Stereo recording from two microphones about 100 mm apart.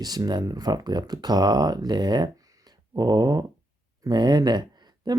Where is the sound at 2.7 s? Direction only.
40° right (ahead or behind).